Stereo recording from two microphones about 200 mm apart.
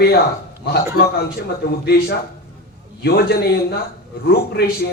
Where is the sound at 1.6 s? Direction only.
55° left (ahead or behind).